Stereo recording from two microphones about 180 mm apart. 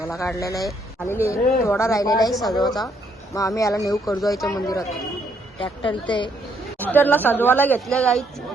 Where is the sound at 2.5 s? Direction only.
20° left (ahead or behind).